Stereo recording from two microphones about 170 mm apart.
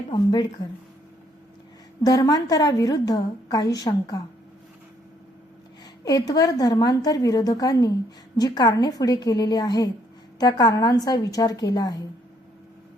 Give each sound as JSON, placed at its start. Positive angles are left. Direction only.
{"t": 0.1, "sound": "a woman's voice", "side_deg": 25}
{"t": 2.0, "sound": "a woman's voice", "side_deg": 20}
{"t": 6.1, "sound": "a woman's voice", "side_deg": 20}